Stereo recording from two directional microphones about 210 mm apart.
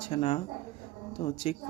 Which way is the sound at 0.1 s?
25° left (ahead or behind).